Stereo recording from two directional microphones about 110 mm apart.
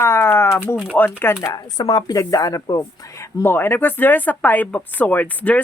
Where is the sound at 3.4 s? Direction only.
20° left (ahead or behind).